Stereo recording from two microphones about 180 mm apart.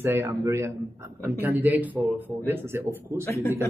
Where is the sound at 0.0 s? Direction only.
15° right (ahead or behind).